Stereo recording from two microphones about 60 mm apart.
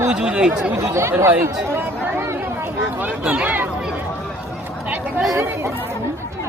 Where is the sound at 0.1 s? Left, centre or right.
Centre.